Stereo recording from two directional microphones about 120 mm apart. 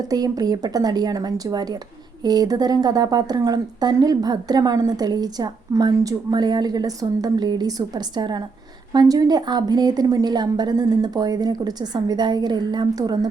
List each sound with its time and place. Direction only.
0.1 s a woman's voice: 30° right (ahead or behind)